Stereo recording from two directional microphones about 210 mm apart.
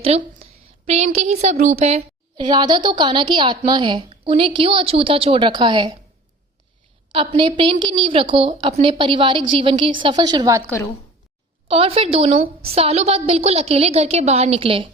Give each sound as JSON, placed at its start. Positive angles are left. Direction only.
{"t": 0.0, "sound": "a woman's voice", "side_deg": -30}
{"t": 2.3, "sound": "a woman's voice", "side_deg": -20}
{"t": 7.1, "sound": "a woman's voice", "side_deg": -25}
{"t": 11.7, "sound": "a woman's voice", "side_deg": -25}